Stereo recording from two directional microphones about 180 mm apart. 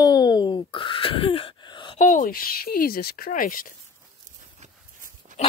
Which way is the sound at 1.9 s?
50° left (ahead or behind).